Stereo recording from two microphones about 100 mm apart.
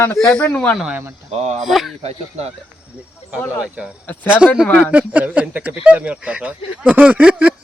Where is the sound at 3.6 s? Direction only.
10° right (ahead or behind).